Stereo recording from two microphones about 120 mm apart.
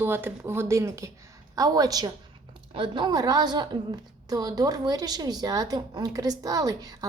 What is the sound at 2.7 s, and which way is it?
A woman's voice, 45° right (ahead or behind).